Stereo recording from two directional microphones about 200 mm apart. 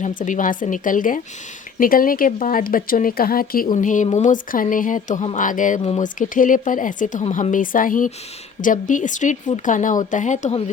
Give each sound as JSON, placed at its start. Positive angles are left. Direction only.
{"t": 0.2, "sound": "speech", "side_deg": 40}